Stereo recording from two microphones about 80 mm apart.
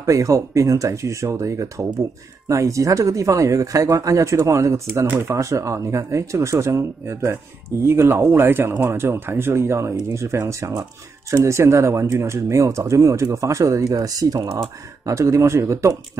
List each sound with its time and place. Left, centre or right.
0.0 s speech: right